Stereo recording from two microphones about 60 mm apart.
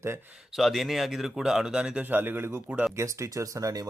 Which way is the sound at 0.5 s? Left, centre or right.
Centre.